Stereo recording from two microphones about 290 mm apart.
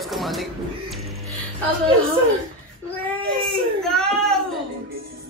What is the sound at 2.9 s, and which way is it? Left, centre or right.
Speech, centre.